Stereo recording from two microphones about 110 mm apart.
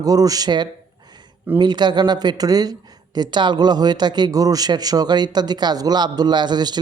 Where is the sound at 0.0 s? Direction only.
35° right (ahead or behind).